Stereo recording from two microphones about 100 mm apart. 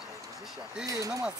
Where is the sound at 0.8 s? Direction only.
35° right (ahead or behind).